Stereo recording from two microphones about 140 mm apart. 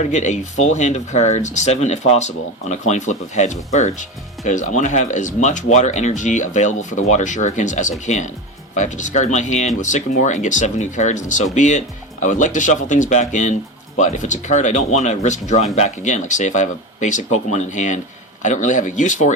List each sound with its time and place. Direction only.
0.0 s speech: 55° left (ahead or behind)